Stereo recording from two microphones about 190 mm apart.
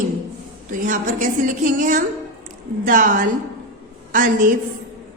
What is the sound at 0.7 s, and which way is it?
A woman's voice, 45° right (ahead or behind).